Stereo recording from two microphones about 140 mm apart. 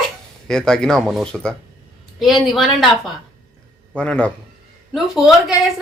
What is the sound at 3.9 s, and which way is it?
A woman's voice, 5° left (ahead or behind).